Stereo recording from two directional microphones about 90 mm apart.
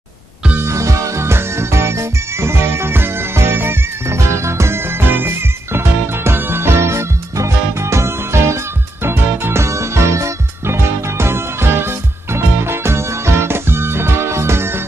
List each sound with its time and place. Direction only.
0.6 s music: 35° right (ahead or behind)